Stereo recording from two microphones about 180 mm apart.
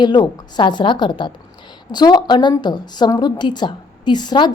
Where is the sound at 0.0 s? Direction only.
25° left (ahead or behind).